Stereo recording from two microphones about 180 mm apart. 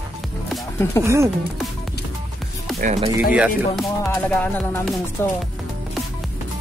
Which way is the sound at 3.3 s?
5° right (ahead or behind).